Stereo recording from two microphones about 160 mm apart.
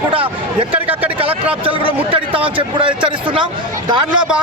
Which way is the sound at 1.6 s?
35° right (ahead or behind).